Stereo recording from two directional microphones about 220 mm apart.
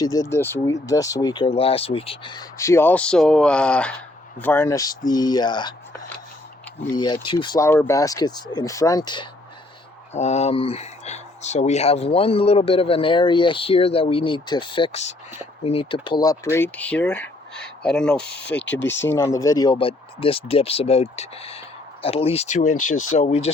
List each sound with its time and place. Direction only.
0.0 s speech: 15° left (ahead or behind)
6.9 s speech: 20° left (ahead or behind)
10.1 s speech: 30° left (ahead or behind); by 18.2 s 5° left (ahead or behind)
18.2 s speech: 50° left (ahead or behind)
18.7 s speech: 10° left (ahead or behind); by 23.5 s 30° left (ahead or behind)